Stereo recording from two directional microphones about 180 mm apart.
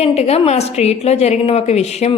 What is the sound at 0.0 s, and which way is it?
A woman's voice, 35° left (ahead or behind).